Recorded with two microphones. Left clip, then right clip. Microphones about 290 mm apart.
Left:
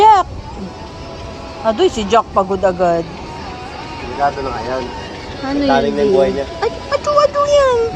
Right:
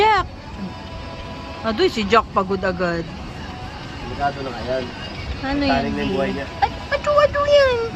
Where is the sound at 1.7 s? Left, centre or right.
Centre.